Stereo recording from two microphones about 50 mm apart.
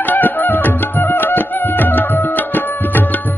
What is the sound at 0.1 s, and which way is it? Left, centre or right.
Music, left.